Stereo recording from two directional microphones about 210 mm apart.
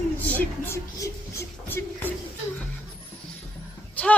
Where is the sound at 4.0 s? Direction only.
5° left (ahead or behind).